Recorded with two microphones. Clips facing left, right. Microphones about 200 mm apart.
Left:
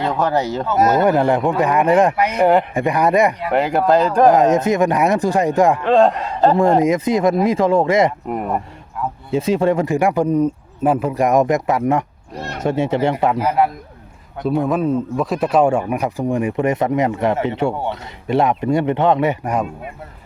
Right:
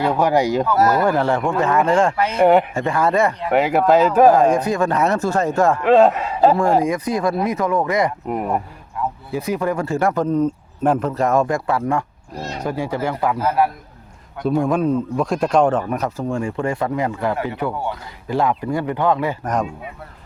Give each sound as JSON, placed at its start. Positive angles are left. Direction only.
{"t": 0.0, "sound": "speech", "side_deg": -10}
{"t": 0.7, "sound": "speech", "side_deg": 20}
{"t": 2.4, "sound": "speech", "side_deg": 0}
{"t": 2.7, "sound": "speech", "side_deg": 15}
{"t": 3.5, "sound": "speech", "side_deg": 0}
{"t": 4.3, "sound": "speech", "side_deg": 20}
{"t": 5.8, "sound": "speech", "side_deg": -5}
{"t": 6.8, "sound": "a man's voice", "side_deg": 20}
{"t": 8.3, "sound": "speech", "side_deg": 0}
{"t": 9.3, "sound": "a man's voice", "side_deg": 25}
{"t": 14.4, "sound": "a man's voice", "side_deg": 0}
{"t": 19.5, "sound": "speech", "side_deg": 5}